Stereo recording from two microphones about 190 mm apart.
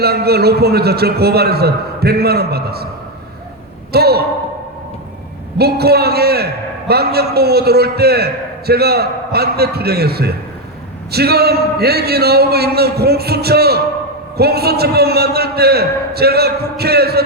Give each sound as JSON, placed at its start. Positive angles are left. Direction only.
{"t": 0.0, "sound": "a man's voice", "side_deg": -55}
{"t": 3.9, "sound": "a man's voice", "side_deg": -55}
{"t": 5.5, "sound": "a man's voice", "side_deg": -55}